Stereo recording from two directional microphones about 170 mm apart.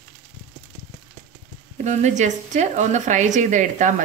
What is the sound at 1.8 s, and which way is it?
A woman's voice, 45° right (ahead or behind).